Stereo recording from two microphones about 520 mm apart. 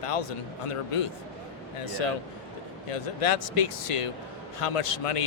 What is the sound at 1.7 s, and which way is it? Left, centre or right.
Speech, left.